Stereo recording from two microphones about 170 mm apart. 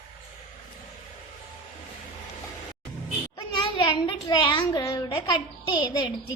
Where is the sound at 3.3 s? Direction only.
25° left (ahead or behind).